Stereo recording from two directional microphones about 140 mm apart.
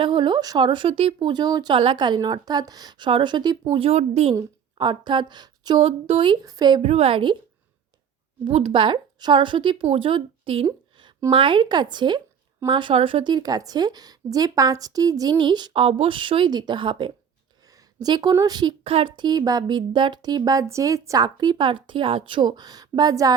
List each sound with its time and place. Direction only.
0.0 s a woman's voice: 35° right (ahead or behind)
4.4 s a woman's voice: 35° right (ahead or behind)
6.8 s a woman's voice: 45° right (ahead or behind)
8.4 s a woman's voice: 40° right (ahead or behind)
18.9 s a woman's voice: 40° right (ahead or behind)